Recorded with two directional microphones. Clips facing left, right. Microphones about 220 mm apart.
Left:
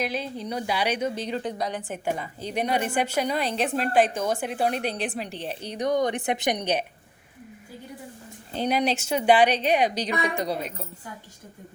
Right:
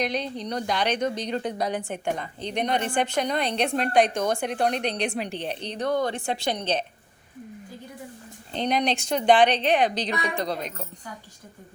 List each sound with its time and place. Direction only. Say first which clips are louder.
0.0 s speech: right 1 dB; 5° left (ahead or behind)
8.5 s a woman's voice: even; 5° left (ahead or behind)